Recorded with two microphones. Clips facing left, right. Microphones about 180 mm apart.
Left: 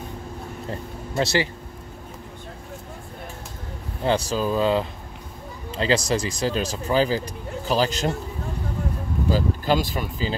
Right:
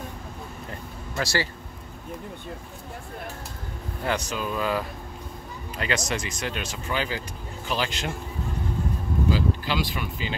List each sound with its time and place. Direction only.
0.7 s vehicle: 25° left (ahead or behind)
4.0 s speech: 30° left (ahead or behind)
9.3 s speech: 45° left (ahead or behind)